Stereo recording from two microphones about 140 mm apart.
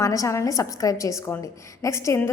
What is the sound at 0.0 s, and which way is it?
A woman's voice, 20° left (ahead or behind).